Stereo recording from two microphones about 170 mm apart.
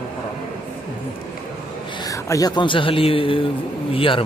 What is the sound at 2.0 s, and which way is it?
Speech, 20° left (ahead or behind).